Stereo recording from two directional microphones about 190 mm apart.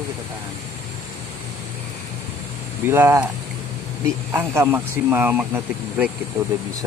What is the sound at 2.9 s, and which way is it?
Speech, 10° right (ahead or behind).